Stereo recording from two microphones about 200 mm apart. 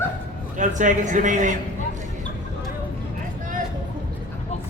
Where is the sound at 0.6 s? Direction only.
40° right (ahead or behind).